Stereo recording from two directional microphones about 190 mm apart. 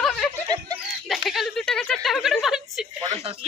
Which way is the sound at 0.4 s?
20° right (ahead or behind).